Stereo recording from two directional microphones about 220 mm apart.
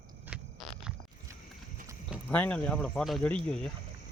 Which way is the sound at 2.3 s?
5° left (ahead or behind).